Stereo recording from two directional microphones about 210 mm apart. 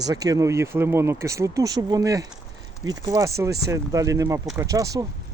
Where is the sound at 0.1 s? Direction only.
15° right (ahead or behind).